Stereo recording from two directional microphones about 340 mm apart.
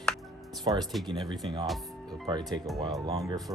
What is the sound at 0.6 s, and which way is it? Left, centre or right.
Speech, centre.